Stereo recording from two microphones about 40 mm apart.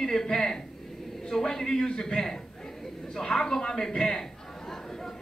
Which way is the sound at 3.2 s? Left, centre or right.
Centre.